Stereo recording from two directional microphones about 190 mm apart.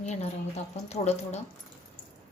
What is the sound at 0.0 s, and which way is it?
A woman's voice, 35° left (ahead or behind).